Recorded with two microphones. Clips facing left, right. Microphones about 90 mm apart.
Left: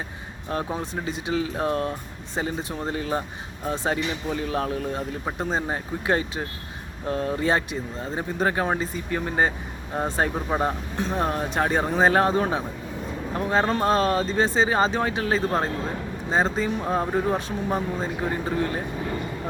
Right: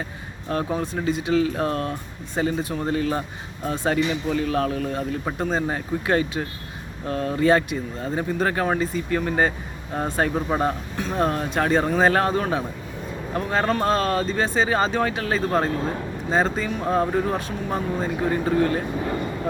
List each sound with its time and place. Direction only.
0.5 s speech: 20° left (ahead or behind)
10.9 s speech: 20° left (ahead or behind)